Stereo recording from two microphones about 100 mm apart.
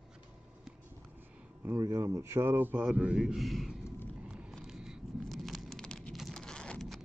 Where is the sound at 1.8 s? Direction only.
35° right (ahead or behind); by 3.7 s centre (ahead or behind).